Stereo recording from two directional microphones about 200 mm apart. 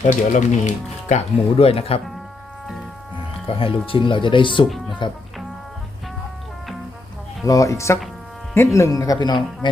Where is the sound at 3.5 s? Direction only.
25° left (ahead or behind).